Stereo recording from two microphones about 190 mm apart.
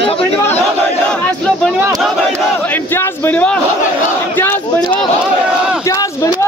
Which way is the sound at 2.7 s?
10° left (ahead or behind).